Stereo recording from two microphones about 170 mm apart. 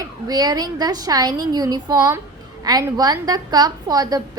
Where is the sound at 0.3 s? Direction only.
25° right (ahead or behind).